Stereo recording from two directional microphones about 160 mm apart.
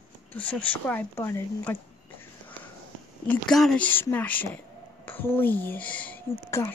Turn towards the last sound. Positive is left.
turn(degrees=15)  # may be behind; listen again after turning